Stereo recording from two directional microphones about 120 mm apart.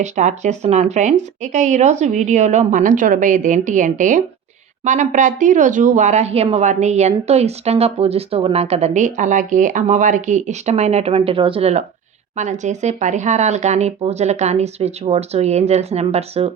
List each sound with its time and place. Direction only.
0.0 s speech: 80° right; by 11.7 s 45° right (ahead or behind)
12.4 s speech: 80° right; by 16.5 s 60° right (ahead or behind)